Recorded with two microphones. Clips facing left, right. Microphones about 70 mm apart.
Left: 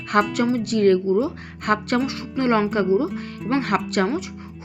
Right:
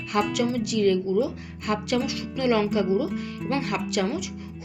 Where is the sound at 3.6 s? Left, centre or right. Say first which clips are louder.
Left 6 dB; left.